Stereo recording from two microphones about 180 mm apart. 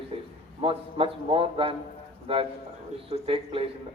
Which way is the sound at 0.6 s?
30° right (ahead or behind).